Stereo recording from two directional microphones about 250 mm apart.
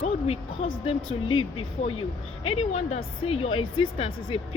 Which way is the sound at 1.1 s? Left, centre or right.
Left.